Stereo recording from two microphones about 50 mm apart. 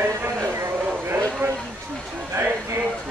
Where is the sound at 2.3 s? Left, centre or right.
Right.